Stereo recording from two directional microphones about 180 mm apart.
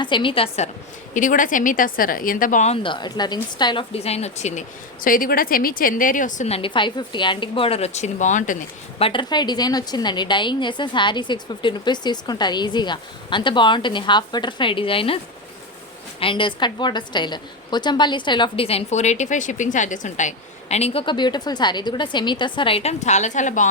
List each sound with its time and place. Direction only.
0.0 s a woman's voice: 25° left (ahead or behind)
1.1 s a woman's voice: 45° left (ahead or behind)
2.7 s a woman's voice: 25° left (ahead or behind)
5.0 s a woman's voice: 50° left (ahead or behind)
9.0 s a woman's voice: 30° left (ahead or behind)
16.2 s a woman's voice: 25° left (ahead or behind); by 23.6 s 45° left (ahead or behind)